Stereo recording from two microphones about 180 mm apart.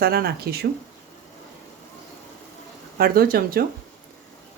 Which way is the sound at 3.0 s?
55° right (ahead or behind).